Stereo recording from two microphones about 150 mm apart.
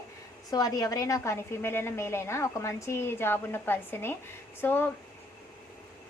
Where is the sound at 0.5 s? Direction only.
25° left (ahead or behind).